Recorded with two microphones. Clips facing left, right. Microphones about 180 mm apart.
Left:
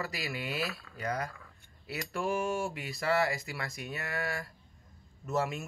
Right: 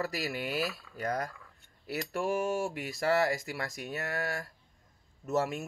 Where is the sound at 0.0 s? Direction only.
40° right (ahead or behind).